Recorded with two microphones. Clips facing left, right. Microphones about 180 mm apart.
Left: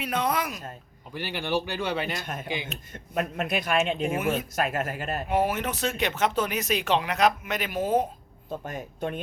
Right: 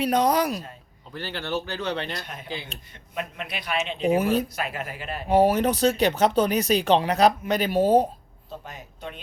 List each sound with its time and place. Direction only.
0.0 s speech: 35° right (ahead or behind)
1.1 s speech: 10° left (ahead or behind)
2.2 s a man's voice: 50° left (ahead or behind)
4.2 s speech: 35° right (ahead or behind)
4.5 s a man's voice: 45° left (ahead or behind)
5.3 s speech: 35° right (ahead or behind)
8.4 s a man's voice: 50° left (ahead or behind)